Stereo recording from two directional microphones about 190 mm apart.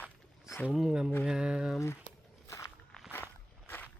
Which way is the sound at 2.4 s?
15° left (ahead or behind).